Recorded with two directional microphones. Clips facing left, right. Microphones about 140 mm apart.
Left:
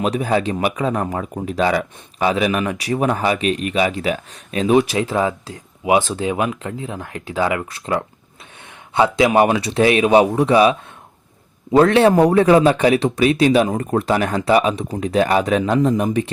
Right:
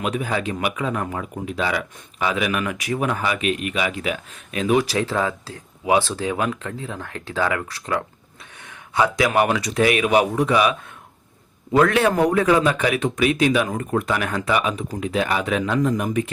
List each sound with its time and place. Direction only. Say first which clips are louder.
0.0 s speech: left 5 dB; 35° left (ahead or behind)